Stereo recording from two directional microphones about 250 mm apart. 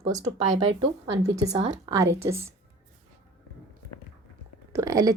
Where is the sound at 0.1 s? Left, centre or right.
Centre.